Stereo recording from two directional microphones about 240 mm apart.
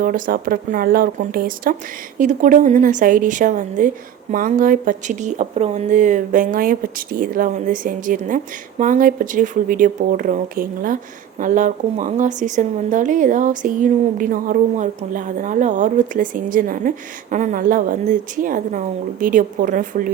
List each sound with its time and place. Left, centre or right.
0.0 s speech: right